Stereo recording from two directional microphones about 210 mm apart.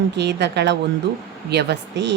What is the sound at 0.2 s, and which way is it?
A woman's voice, 55° right (ahead or behind).